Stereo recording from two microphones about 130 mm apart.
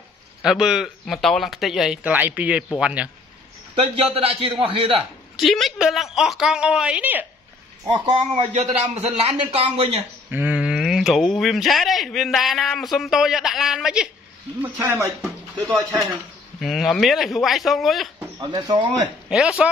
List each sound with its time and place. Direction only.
0.4 s speech: 5° right (ahead or behind)
3.7 s a man's voice: 45° right (ahead or behind)
5.3 s speech: centre (ahead or behind)
7.8 s a man's voice: 35° right (ahead or behind)
10.3 s speech: 10° right (ahead or behind)
14.6 s a man's voice: 20° right (ahead or behind)
15.2 s a sound: centre (ahead or behind)
16.1 s speech: centre (ahead or behind)
18.4 s speech: 35° right (ahead or behind)
19.2 s speech: 5° right (ahead or behind)